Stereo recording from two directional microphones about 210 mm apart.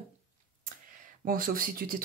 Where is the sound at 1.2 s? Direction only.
40° right (ahead or behind).